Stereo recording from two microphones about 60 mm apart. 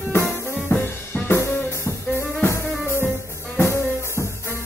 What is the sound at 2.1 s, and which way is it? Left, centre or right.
Music, left.